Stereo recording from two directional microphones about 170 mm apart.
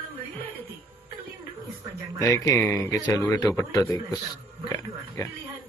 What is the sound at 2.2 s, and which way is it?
A man's voice, 20° left (ahead or behind).